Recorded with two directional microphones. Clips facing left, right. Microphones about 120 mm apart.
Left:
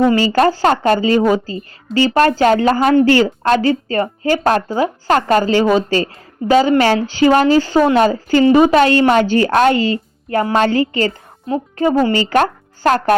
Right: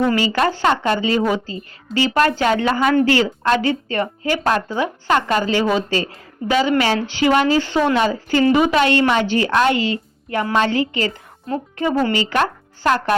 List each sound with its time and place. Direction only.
0.0 s a woman's voice: 25° left (ahead or behind)
0.3 s a woman's voice: 40° left (ahead or behind)